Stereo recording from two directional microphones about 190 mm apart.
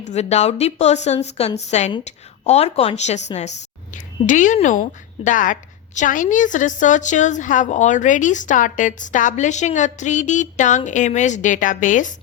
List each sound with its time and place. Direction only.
0.1 s a woman's voice: 35° left (ahead or behind)